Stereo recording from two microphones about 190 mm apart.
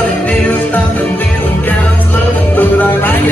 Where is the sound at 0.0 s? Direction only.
10° left (ahead or behind).